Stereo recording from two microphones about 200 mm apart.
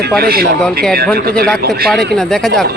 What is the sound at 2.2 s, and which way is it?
Speech, 5° left (ahead or behind).